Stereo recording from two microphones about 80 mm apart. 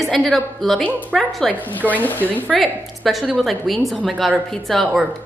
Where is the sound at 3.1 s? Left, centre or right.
Centre.